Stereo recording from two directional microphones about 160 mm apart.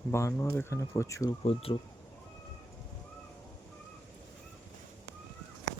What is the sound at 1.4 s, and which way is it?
Speech, 35° left (ahead or behind).